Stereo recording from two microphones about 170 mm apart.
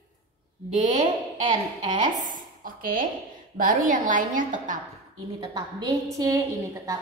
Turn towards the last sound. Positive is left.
turn(degrees=-20)  # may be behind; listen again after turning